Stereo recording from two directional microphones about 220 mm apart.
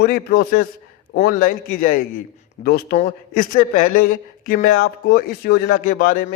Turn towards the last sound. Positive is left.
turn(degrees=40)  # may be behind; listen again after turning